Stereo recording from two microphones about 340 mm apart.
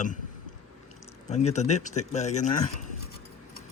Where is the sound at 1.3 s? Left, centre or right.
Centre.